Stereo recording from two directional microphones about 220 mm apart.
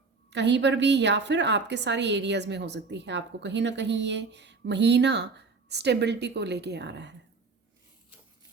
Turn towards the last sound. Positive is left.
turn(degrees=-50)  # may be behind; listen again after turning